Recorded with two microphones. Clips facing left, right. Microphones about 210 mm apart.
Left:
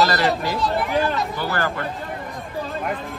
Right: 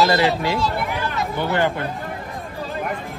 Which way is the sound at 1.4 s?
20° right (ahead or behind).